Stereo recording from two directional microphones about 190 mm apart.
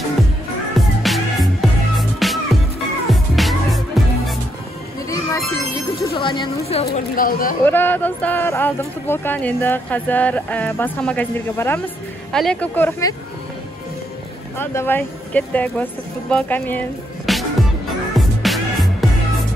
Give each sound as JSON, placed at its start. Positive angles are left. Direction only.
{"t": 0.7, "sound": "music", "side_deg": 0}
{"t": 6.1, "sound": "speech", "side_deg": 25}
{"t": 6.9, "sound": "speech", "side_deg": 50}
{"t": 7.6, "sound": "speech", "side_deg": 10}
{"t": 14.6, "sound": "speech", "side_deg": 10}
{"t": 17.3, "sound": "music", "side_deg": 0}